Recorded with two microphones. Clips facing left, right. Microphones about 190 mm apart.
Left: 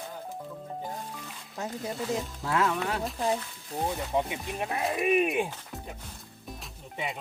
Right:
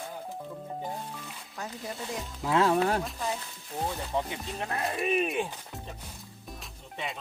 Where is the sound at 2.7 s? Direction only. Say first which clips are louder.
Right 5 dB; 40° right (ahead or behind).